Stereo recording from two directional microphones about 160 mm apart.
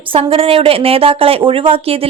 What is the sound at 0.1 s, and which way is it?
A woman's voice, 35° right (ahead or behind).